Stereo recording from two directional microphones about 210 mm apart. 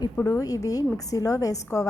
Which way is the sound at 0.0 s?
15° left (ahead or behind).